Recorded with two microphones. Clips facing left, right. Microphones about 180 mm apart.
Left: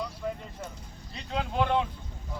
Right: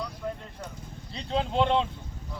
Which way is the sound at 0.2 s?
Centre (ahead or behind).